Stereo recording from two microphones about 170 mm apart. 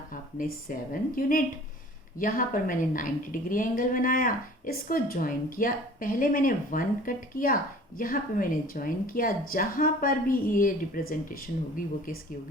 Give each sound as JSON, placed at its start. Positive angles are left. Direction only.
{"t": 0.1, "sound": "a woman's voice", "side_deg": 50}